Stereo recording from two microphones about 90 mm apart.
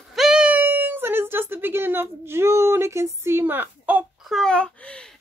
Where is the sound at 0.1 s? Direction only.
5° right (ahead or behind).